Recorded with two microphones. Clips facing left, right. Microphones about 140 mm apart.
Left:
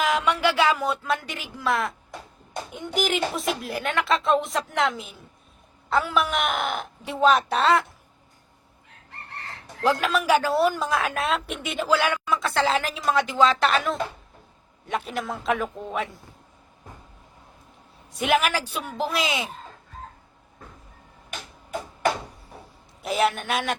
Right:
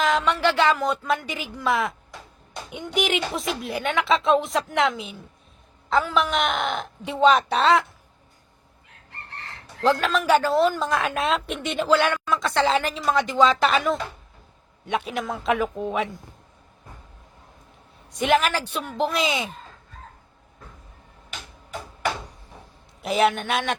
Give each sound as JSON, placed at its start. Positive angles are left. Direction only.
{"t": 0.0, "sound": "speech", "side_deg": 10}
{"t": 9.8, "sound": "a woman's voice", "side_deg": 10}
{"t": 18.1, "sound": "speech", "side_deg": 5}
{"t": 21.2, "sound": "tick-tock", "side_deg": 50}
{"t": 23.0, "sound": "speech", "side_deg": 0}